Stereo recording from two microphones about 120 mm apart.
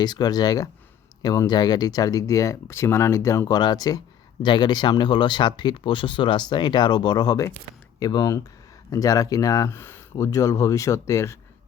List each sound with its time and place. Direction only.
0.0 s speech: 35° left (ahead or behind)